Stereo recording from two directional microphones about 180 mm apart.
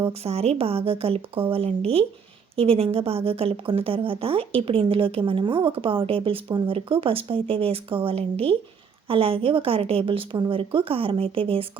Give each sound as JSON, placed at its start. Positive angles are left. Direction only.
{"t": 0.1, "sound": "a woman's voice", "side_deg": -35}